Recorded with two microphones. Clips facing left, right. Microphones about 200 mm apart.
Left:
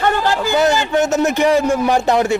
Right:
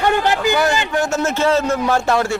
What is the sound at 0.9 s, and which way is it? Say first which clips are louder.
A man's voice: left 4 dB; 20° left (ahead or behind).